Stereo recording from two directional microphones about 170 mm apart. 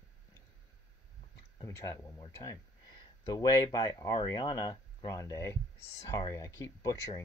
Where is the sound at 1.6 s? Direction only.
20° left (ahead or behind).